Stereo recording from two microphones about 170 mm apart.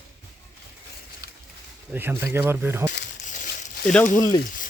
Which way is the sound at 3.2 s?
45° left (ahead or behind).